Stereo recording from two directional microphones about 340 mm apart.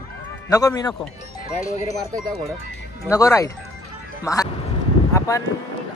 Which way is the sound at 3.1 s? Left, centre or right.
Centre.